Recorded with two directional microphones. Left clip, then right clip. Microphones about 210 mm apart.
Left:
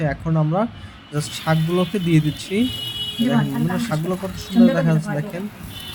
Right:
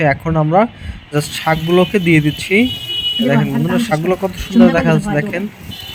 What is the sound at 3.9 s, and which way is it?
Speech, 20° right (ahead or behind).